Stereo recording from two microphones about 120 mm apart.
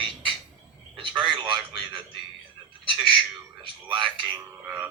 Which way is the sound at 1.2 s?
40° right (ahead or behind).